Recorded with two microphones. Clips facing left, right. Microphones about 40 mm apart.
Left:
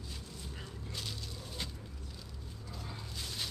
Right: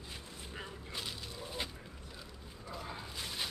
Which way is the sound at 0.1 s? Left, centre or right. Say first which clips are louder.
Right 3 dB; right.